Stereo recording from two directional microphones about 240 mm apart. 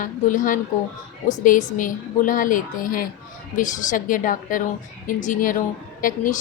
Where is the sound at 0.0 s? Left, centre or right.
Left.